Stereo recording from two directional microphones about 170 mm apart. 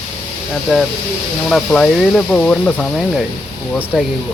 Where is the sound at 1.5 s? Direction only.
5° left (ahead or behind).